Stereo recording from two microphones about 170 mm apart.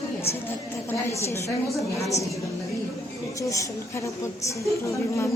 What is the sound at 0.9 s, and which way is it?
A woman's voice, 15° left (ahead or behind).